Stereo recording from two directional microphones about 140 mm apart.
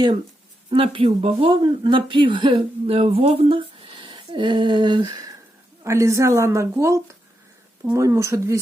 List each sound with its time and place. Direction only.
0.7 s speech: 40° right (ahead or behind)
5.8 s a woman's voice: 20° right (ahead or behind)